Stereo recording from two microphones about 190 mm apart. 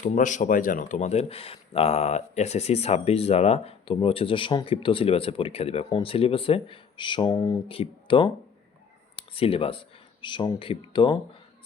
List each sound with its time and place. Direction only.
0.0 s speech: 40° left (ahead or behind); by 11.2 s 25° left (ahead or behind)